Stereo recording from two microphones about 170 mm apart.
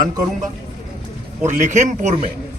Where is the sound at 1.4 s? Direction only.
45° right (ahead or behind).